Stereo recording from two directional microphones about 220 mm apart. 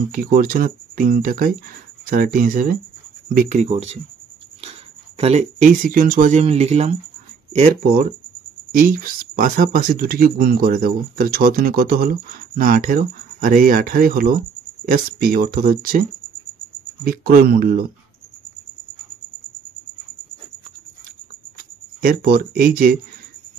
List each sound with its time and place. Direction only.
0.1 s speech: 40° right (ahead or behind)
17.0 s speech: 40° right (ahead or behind)
22.0 s speech: 45° right (ahead or behind)